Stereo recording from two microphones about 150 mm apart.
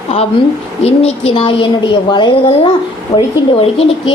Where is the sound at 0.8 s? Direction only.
40° left (ahead or behind).